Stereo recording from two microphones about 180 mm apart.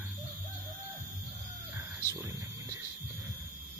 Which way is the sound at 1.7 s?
15° right (ahead or behind).